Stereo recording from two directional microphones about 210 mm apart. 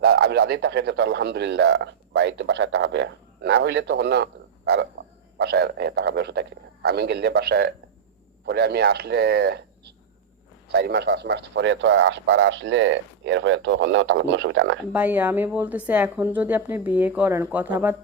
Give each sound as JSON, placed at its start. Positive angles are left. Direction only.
{"t": 0.0, "sound": "a man's voice", "side_deg": -50}
{"t": 14.9, "sound": "speech", "side_deg": -10}